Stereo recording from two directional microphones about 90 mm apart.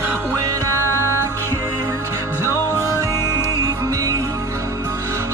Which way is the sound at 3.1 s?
30° left (ahead or behind).